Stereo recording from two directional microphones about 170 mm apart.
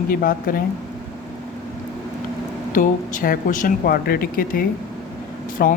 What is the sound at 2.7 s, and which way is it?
Speech, 50° left (ahead or behind).